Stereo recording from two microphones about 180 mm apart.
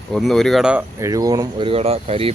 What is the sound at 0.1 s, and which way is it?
Speech, centre (ahead or behind).